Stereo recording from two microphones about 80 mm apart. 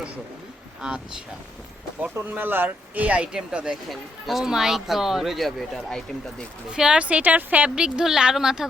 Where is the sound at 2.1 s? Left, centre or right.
Right; by 6.4 s centre.